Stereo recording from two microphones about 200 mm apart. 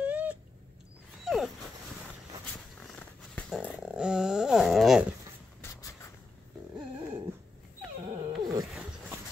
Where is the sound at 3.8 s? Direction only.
5° right (ahead or behind).